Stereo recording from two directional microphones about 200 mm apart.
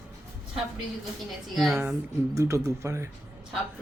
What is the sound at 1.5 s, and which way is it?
Speech, centre (ahead or behind).